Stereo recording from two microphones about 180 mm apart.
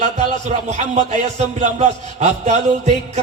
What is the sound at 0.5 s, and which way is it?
Male singing, 40° right (ahead or behind).